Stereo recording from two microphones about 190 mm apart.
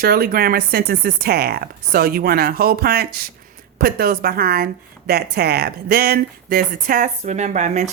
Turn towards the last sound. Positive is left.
turn(degrees=-40)  # may be behind; listen again after turning